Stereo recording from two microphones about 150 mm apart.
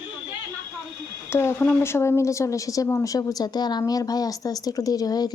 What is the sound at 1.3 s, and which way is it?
Speech, 15° left (ahead or behind).